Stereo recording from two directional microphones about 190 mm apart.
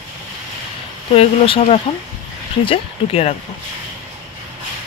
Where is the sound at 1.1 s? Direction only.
30° left (ahead or behind).